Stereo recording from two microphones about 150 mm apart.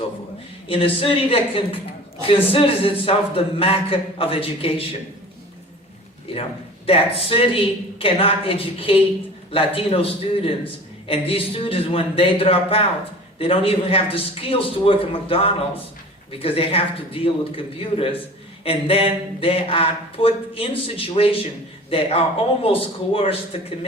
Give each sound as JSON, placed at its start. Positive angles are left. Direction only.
{"t": 0.7, "sound": "speech", "side_deg": 40}
{"t": 6.8, "sound": "speech", "side_deg": 40}